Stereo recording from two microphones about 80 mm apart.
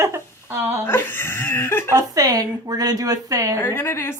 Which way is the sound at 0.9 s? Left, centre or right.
Left.